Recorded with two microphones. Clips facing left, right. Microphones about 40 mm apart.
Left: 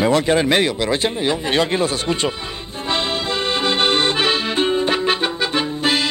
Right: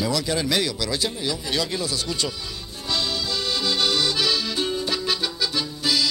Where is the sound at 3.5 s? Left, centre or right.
Left.